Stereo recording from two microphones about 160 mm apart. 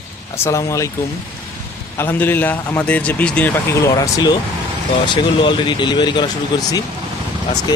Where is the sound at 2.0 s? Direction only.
15° left (ahead or behind).